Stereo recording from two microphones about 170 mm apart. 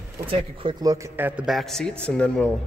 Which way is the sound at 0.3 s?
30° right (ahead or behind).